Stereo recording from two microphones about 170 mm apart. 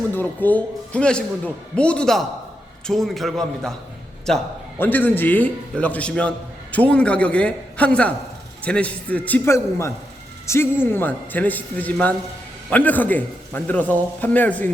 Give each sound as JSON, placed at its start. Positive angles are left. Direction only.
{"t": 0.1, "sound": "a man's voice", "side_deg": 10}
{"t": 4.8, "sound": "a man's voice", "side_deg": 10}